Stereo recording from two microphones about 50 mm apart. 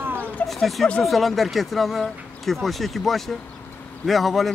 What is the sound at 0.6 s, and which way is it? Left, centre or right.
Speech, centre.